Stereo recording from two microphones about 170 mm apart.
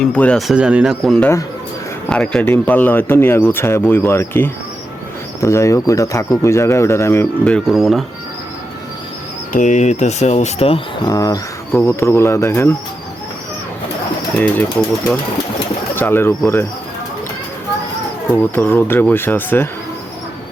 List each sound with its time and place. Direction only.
0.0 s speech: 5° left (ahead or behind)
9.5 s speech: 45° left (ahead or behind)
11.0 s speech: 20° left (ahead or behind)
14.3 s speech: 5° left (ahead or behind)
16.0 s speech: 15° left (ahead or behind)
18.5 s speech: 15° left (ahead or behind)